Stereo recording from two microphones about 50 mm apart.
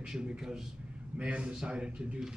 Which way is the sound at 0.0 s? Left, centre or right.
Centre.